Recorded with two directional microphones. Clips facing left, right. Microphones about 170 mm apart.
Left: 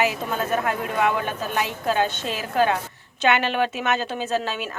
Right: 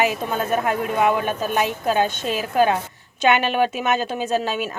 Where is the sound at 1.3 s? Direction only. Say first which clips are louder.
Right 4 dB; 15° right (ahead or behind).